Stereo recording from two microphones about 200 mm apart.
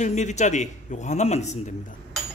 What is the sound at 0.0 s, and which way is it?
Speech, 35° left (ahead or behind).